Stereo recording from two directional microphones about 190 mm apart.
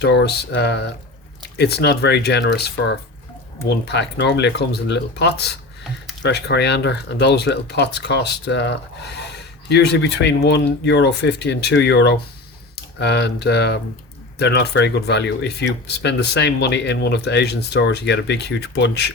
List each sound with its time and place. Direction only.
0.0 s speech: 65° left (ahead or behind)